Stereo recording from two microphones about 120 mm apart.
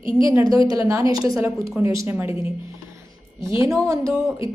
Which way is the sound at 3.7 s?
25° right (ahead or behind).